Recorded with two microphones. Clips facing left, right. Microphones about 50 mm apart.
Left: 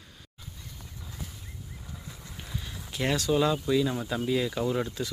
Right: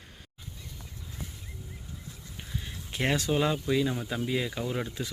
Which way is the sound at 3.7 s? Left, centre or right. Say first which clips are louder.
Left 2 dB; centre.